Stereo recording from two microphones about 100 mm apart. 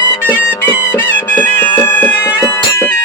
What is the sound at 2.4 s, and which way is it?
Bagpipes, 25° left (ahead or behind).